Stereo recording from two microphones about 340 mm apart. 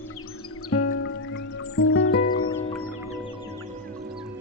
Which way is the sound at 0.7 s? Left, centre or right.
Left.